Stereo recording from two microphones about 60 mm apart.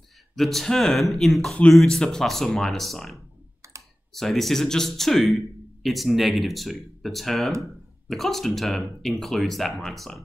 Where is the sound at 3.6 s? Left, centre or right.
Right.